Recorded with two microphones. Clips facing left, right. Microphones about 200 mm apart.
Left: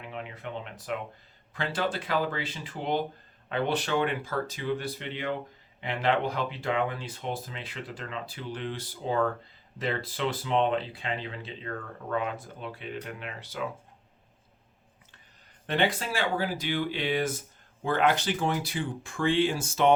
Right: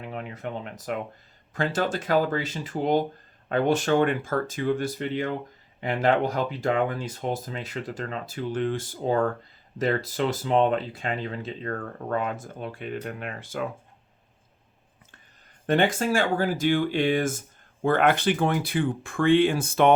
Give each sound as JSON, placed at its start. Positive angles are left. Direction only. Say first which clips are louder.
{"t": 0.0, "sound": "speech", "louder": "right 5 dB", "side_deg": -45}
{"t": 15.6, "sound": "speech", "louder": "right 5 dB", "side_deg": -45}